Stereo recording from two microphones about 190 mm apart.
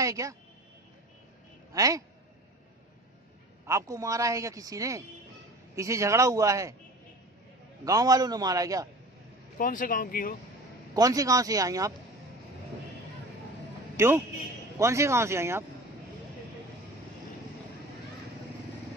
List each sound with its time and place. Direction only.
0.0 s speech: 15° right (ahead or behind)
1.7 s a man's voice: 15° right (ahead or behind)
3.6 s a man's voice: 15° right (ahead or behind)
7.8 s a man's voice: 20° right (ahead or behind)
9.6 s speech: 45° left (ahead or behind)
11.0 s a man's voice: 20° right (ahead or behind)
13.9 s a man's voice: 10° right (ahead or behind)